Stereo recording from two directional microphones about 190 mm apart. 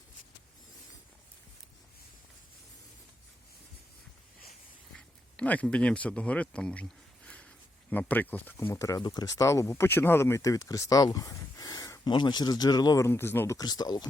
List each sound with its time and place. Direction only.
4.9 s speech: 5° left (ahead or behind)